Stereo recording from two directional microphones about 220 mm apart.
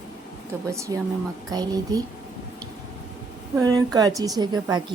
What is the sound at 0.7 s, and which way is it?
A woman's voice, 15° right (ahead or behind).